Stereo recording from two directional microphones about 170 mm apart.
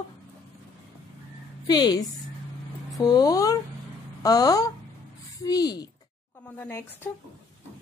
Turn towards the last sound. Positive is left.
turn(degrees=10)  # may be behind; listen again after turning